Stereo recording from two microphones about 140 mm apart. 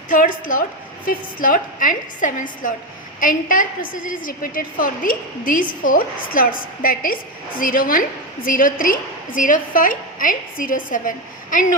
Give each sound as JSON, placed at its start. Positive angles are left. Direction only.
{"t": 0.1, "sound": "a woman's voice", "side_deg": 70}
{"t": 1.0, "sound": "a woman's voice", "side_deg": 85}